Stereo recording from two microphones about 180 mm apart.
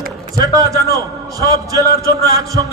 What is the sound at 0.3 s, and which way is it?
A man's voice, 20° right (ahead or behind).